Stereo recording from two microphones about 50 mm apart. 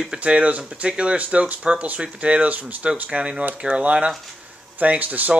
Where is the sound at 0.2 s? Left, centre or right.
Right.